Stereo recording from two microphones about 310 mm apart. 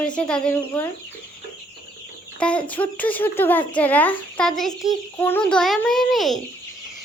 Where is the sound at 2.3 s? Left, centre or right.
Centre.